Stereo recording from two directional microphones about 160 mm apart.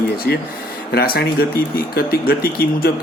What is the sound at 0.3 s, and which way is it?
Speech, 85° left.